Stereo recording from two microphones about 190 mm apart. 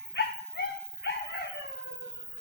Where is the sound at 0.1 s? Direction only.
60° left (ahead or behind).